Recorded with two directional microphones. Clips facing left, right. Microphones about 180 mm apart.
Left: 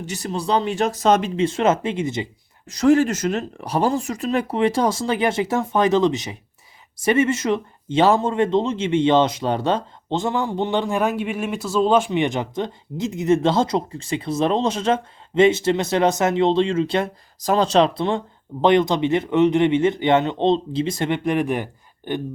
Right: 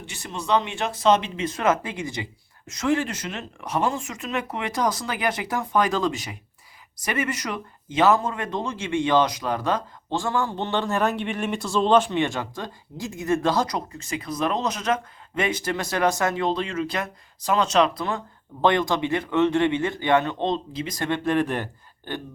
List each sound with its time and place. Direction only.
0.0 s speech: 40° left (ahead or behind)
1.4 s speech: 25° left (ahead or behind)
2.6 s speech: 35° left (ahead or behind); by 22.2 s 15° left (ahead or behind)